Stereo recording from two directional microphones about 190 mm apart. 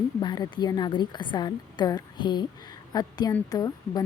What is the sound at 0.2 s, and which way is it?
A woman's voice, 25° left (ahead or behind).